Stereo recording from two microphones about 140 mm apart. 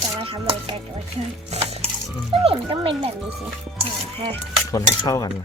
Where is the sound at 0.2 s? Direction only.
40° right (ahead or behind).